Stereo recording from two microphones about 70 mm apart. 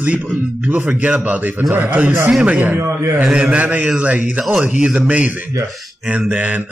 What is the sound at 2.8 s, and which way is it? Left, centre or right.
Speech, right.